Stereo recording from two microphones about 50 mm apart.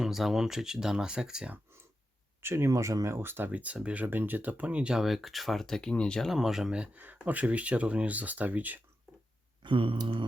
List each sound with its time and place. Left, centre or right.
0.0 s speech: centre
2.4 s speech: right
2.6 s speech: right
3.2 s speech: right
3.5 s speech: right
4.9 s speech: centre
6.2 s speech: centre
6.9 s speech: right